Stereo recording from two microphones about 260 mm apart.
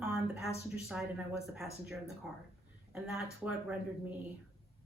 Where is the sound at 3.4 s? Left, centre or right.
Centre.